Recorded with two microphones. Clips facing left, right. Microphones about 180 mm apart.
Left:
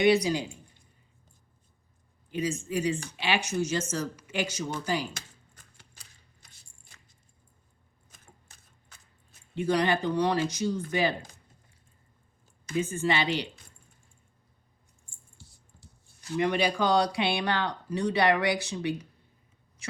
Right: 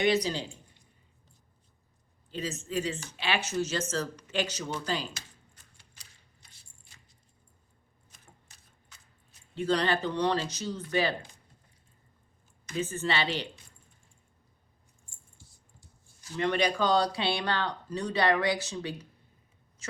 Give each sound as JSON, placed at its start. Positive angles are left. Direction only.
{"t": 0.0, "sound": "speech", "side_deg": 10}
{"t": 2.3, "sound": "speech", "side_deg": 15}
{"t": 9.6, "sound": "speech", "side_deg": 15}
{"t": 12.7, "sound": "speech", "side_deg": 15}
{"t": 15.4, "sound": "a sound", "side_deg": 70}
{"t": 16.4, "sound": "speech", "side_deg": 10}